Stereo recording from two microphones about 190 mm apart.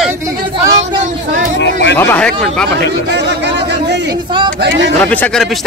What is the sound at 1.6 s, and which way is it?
Speech, 65° left (ahead or behind).